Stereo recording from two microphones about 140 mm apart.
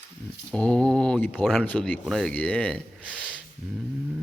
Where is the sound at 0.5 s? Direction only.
5° left (ahead or behind).